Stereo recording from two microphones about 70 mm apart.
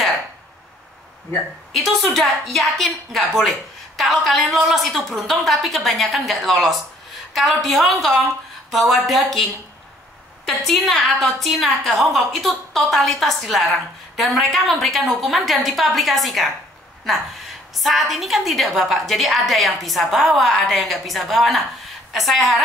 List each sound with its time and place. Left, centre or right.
1.7 s a woman's voice: centre